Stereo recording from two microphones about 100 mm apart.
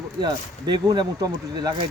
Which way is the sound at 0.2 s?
45° right (ahead or behind).